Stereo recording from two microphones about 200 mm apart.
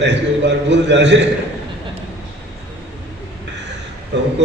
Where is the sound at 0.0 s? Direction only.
60° right (ahead or behind).